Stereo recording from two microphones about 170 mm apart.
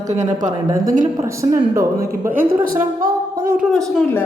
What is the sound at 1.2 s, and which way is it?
Speech, 15° right (ahead or behind).